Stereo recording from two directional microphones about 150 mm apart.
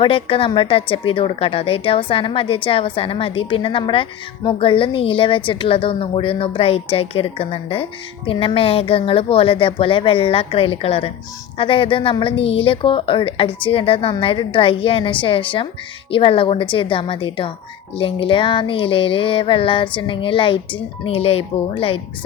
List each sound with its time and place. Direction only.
0.0 s a woman's voice: 35° left (ahead or behind)